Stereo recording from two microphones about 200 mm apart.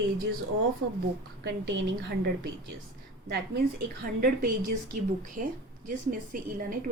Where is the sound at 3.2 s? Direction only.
50° right (ahead or behind).